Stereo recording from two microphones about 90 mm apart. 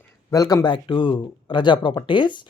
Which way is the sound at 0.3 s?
40° left (ahead or behind).